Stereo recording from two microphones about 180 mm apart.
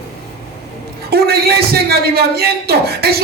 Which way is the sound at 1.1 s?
60° right (ahead or behind).